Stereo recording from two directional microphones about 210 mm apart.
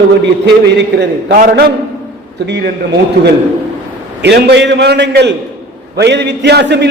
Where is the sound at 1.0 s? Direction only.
45° right (ahead or behind).